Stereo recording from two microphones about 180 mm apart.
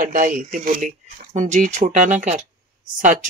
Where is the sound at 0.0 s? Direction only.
45° right (ahead or behind).